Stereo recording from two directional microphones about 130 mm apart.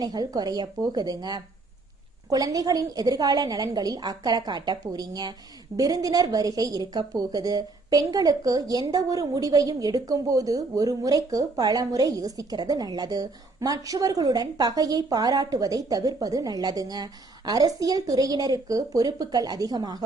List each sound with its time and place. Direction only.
0.0 s a woman's voice: 30° right (ahead or behind)